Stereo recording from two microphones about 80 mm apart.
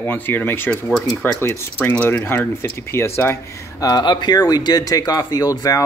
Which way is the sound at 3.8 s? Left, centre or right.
Left.